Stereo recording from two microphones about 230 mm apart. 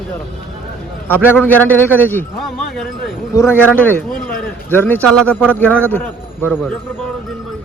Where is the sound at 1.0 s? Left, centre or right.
Centre.